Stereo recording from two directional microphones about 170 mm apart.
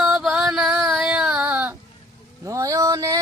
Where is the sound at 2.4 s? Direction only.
20° right (ahead or behind).